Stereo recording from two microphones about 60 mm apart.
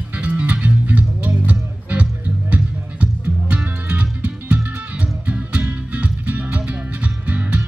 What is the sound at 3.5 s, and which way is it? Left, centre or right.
Music, right.